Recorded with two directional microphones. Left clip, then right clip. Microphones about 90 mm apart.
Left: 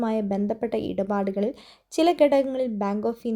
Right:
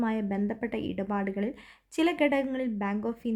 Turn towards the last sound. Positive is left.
turn(degrees=25)  # may be behind; listen again after turning